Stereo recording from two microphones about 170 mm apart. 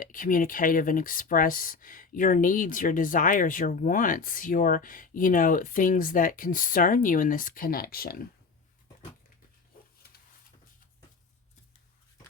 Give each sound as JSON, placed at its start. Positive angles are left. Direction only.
{"t": 0.0, "sound": "speech", "side_deg": 55}